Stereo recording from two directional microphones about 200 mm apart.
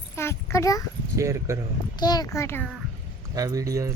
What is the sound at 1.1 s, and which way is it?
Speech, 15° right (ahead or behind).